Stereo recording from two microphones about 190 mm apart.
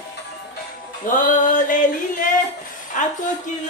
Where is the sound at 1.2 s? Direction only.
40° left (ahead or behind).